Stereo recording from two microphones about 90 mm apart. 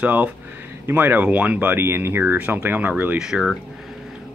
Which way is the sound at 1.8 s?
25° right (ahead or behind).